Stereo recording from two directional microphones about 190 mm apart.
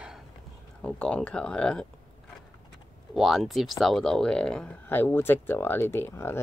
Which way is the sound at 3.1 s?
Centre (ahead or behind).